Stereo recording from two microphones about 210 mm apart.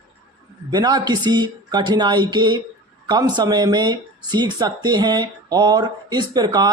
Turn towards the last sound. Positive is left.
turn(degrees=-20)  # may be behind; listen again after turning